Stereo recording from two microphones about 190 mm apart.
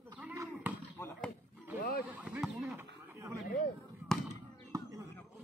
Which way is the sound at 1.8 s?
50° left (ahead or behind).